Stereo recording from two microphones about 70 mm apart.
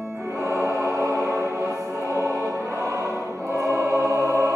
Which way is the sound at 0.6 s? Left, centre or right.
Right.